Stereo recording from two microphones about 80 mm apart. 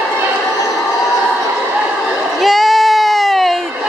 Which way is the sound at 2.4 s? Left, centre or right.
Centre.